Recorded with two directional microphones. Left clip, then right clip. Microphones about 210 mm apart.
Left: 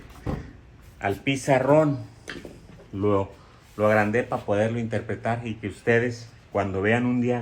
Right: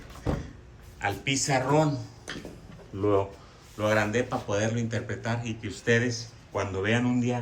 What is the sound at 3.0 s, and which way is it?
A man's voice, 45° left (ahead or behind).